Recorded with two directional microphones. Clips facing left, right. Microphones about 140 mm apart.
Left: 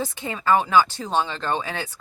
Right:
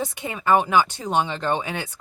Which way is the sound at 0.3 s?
20° right (ahead or behind).